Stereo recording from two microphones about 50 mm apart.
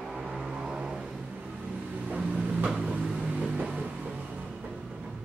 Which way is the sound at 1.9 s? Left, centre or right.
Right.